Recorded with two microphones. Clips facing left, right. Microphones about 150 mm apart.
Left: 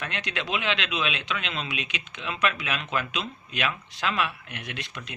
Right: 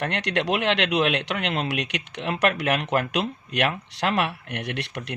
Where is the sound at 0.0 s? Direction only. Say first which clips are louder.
Right 8 dB; 70° right (ahead or behind).